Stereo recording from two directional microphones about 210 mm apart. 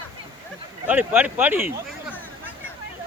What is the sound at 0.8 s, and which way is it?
Speech, 5° right (ahead or behind).